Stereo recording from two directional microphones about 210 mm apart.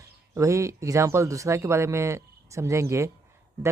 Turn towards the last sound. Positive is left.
turn(degrees=-15)  # may be behind; listen again after turning